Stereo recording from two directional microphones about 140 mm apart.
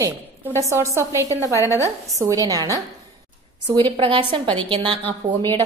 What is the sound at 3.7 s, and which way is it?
A woman's voice, 40° right (ahead or behind).